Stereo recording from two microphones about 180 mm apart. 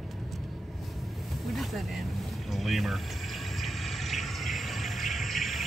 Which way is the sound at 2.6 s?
Centre (ahead or behind).